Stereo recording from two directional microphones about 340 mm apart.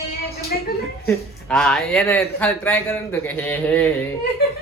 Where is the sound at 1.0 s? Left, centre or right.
Centre.